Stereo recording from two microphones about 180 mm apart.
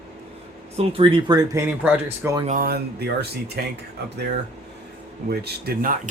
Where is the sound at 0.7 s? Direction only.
30° right (ahead or behind).